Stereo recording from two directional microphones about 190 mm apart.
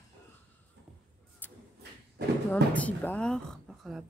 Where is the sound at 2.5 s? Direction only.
10° left (ahead or behind).